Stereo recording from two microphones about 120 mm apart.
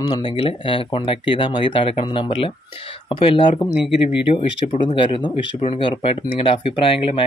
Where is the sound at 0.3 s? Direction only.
50° left (ahead or behind).